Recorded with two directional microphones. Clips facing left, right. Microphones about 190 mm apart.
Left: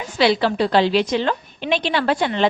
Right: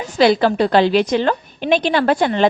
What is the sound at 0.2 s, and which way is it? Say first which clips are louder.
A woman's voice: right 4 dB; 45° right (ahead or behind).